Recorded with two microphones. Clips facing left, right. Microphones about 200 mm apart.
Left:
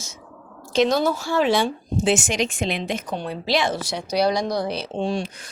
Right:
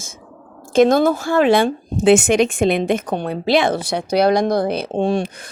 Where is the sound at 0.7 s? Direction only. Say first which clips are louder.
Right 6 dB; 50° right (ahead or behind).